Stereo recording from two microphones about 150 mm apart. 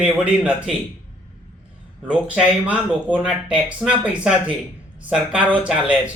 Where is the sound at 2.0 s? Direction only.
10° right (ahead or behind).